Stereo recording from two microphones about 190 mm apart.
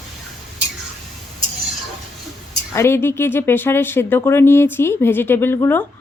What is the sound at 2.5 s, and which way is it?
Speech, 15° left (ahead or behind).